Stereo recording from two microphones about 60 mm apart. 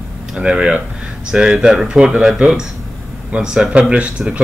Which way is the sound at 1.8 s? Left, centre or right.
Centre.